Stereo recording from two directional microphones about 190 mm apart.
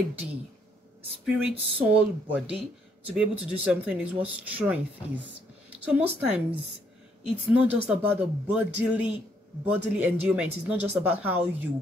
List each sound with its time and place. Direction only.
1.2 s speech: 5° right (ahead or behind)